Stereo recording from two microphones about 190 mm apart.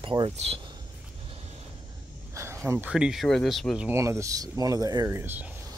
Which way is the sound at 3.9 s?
15° right (ahead or behind).